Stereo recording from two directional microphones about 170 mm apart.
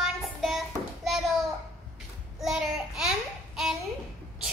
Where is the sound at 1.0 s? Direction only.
Centre (ahead or behind).